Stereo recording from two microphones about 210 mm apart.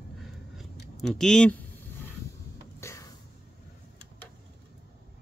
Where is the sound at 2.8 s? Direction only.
15° left (ahead or behind).